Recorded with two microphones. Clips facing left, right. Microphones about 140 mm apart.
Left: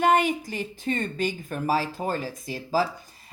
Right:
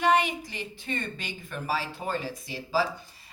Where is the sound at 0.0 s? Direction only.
45° left (ahead or behind).